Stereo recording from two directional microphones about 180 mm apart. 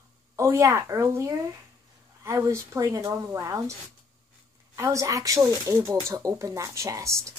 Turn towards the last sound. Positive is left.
turn(degrees=-15)  # may be behind; listen again after turning